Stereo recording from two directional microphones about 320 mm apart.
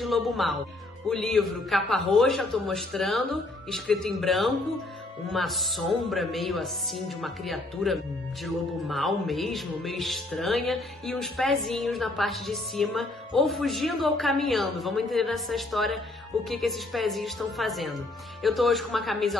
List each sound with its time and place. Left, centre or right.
0.0 s speech: centre